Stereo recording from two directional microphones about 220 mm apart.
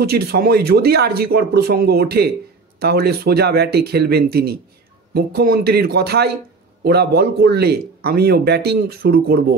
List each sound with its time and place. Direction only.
0.0 s a man's voice: 45° right (ahead or behind)